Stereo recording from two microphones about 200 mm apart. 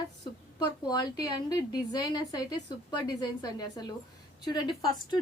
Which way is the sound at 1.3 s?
20° left (ahead or behind).